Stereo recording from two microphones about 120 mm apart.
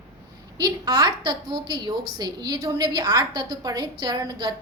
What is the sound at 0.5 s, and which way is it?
A woman's voice, 35° right (ahead or behind).